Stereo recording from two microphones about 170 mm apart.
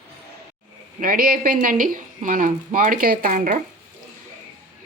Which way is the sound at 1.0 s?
55° right (ahead or behind).